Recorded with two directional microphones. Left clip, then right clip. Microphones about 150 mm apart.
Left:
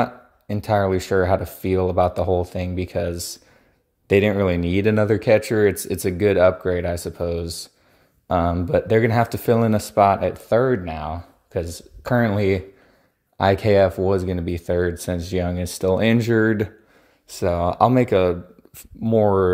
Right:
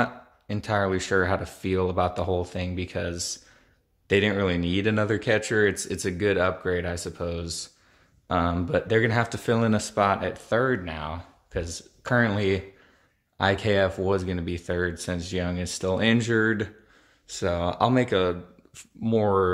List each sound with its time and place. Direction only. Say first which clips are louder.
0.0 s speech: left 4 dB; 30° left (ahead or behind)
18.9 s speech: left 5 dB; 30° left (ahead or behind)